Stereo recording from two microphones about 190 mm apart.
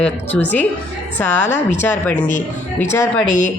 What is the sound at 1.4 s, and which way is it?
Speech, 40° left (ahead or behind).